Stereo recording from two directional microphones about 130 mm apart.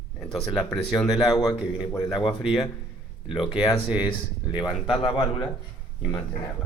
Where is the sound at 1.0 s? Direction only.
Centre (ahead or behind).